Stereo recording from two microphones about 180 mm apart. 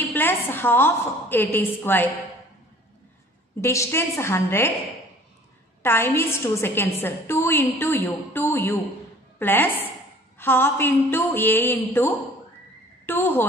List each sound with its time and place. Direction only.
0.1 s a woman's voice: 10° left (ahead or behind)
3.6 s a woman's voice: 15° left (ahead or behind)
5.8 s a woman's voice: 10° left (ahead or behind)